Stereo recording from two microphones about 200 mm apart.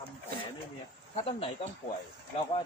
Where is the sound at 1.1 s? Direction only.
30° left (ahead or behind).